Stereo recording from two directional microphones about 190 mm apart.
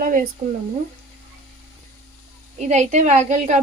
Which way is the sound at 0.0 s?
45° right (ahead or behind).